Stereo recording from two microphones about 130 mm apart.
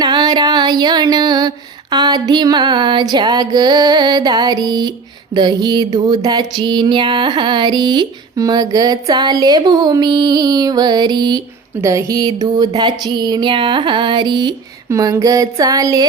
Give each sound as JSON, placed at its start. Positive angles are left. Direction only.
{"t": 0.0, "sound": "music", "side_deg": -30}
{"t": 11.8, "sound": "music", "side_deg": -25}
{"t": 14.8, "sound": "a sound", "side_deg": -25}